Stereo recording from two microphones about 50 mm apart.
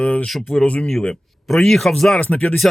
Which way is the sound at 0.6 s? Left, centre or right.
Left.